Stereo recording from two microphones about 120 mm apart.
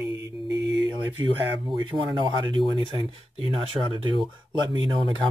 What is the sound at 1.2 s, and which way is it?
Speech, 40° right (ahead or behind).